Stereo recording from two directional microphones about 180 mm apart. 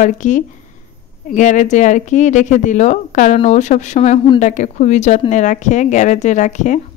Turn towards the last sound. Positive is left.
turn(degrees=40)  # may be behind; listen again after turning